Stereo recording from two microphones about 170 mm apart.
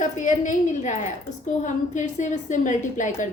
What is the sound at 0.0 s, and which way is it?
A woman's voice, 45° left (ahead or behind).